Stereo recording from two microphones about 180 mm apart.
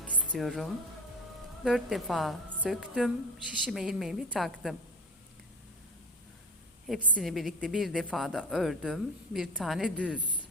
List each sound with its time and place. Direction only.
0.3 s a woman's voice: centre (ahead or behind)
6.8 s a woman's voice: centre (ahead or behind)
10.2 s speech: 25° right (ahead or behind)